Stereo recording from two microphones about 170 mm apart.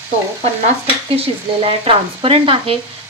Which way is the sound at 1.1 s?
35° right (ahead or behind).